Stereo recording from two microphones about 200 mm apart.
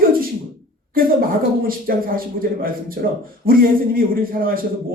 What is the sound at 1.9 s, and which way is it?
A man's voice, 45° right (ahead or behind).